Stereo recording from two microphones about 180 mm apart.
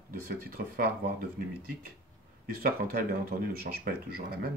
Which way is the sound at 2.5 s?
55° right (ahead or behind).